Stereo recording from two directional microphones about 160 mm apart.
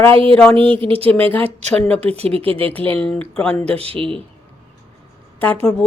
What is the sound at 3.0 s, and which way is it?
Speech, 5° left (ahead or behind).